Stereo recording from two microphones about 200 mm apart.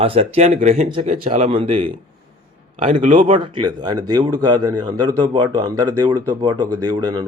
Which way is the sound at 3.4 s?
25° right (ahead or behind).